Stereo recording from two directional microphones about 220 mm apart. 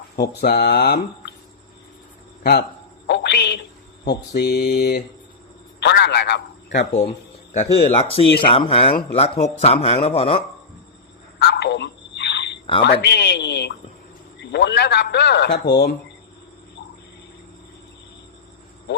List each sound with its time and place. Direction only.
0.2 s a man's voice: 45° left (ahead or behind)
2.4 s speech: 45° left (ahead or behind)
3.1 s a sound: 50° left (ahead or behind)
4.0 s a man's voice: 50° left (ahead or behind)
7.5 s speech: 30° left (ahead or behind)
11.3 s a sound: 45° left (ahead or behind)
12.8 s a man's voice: 50° left (ahead or behind)